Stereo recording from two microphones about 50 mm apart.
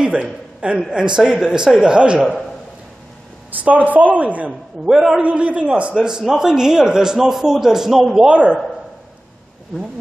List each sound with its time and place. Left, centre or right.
0.0 s a man's voice: right
3.6 s a man's voice: right
4.8 s a man's voice: centre
5.2 s a man's voice: right
6.0 s a man's voice: centre
8.3 s a man's voice: right